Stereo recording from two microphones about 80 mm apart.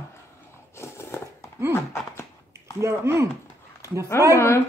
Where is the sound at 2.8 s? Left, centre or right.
Right.